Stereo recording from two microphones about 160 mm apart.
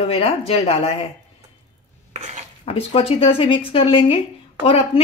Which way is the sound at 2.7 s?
35° left (ahead or behind).